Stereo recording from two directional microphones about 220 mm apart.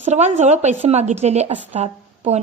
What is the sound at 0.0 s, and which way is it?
A woman's voice, 30° right (ahead or behind).